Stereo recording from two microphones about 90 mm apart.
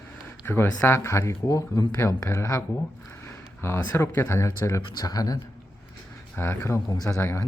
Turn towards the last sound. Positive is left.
turn(degrees=30)  # may be behind; listen again after turning